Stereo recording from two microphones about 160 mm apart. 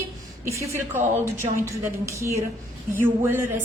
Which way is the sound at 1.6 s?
15° right (ahead or behind).